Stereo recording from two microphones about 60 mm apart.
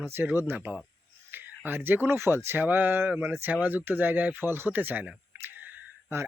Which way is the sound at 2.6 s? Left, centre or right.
Right.